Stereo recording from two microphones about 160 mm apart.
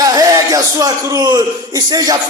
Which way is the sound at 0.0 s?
25° right (ahead or behind).